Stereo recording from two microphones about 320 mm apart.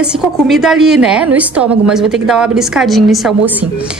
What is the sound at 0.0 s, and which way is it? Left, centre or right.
A woman's voice, centre.